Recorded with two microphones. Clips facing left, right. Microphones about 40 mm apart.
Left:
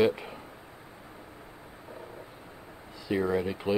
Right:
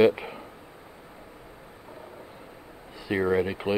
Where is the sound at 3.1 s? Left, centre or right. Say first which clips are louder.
Right 3 dB; centre.